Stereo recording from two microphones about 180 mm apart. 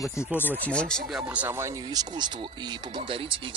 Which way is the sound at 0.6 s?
5° left (ahead or behind).